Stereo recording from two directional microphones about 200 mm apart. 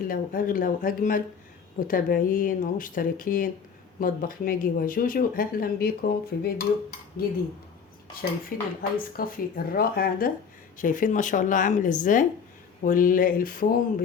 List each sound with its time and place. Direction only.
0.1 s a woman's voice: 45° left (ahead or behind)